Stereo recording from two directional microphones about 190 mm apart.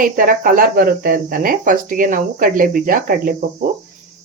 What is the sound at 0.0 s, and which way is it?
Speech, 45° right (ahead or behind).